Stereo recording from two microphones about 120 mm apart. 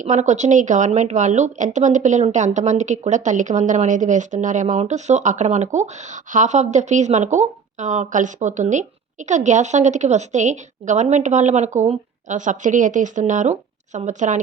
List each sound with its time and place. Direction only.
0.0 s a woman's voice: 85° right